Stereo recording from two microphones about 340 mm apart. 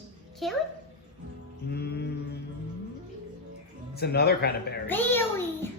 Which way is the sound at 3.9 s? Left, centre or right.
Left.